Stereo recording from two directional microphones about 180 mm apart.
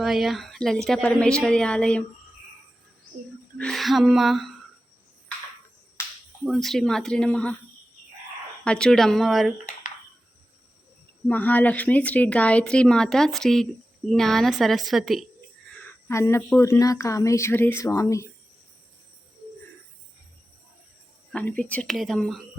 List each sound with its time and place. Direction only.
0.0 s a woman's voice: centre (ahead or behind)
3.6 s a woman's voice: centre (ahead or behind)
6.4 s a woman's voice: centre (ahead or behind)
8.6 s a woman's voice: 5° left (ahead or behind)
11.3 s a woman's voice: 10° left (ahead or behind)
15.7 s speech: 10° left (ahead or behind)
21.3 s a woman's voice: 5° left (ahead or behind)